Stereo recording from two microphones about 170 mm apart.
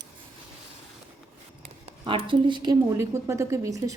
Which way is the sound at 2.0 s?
30° right (ahead or behind).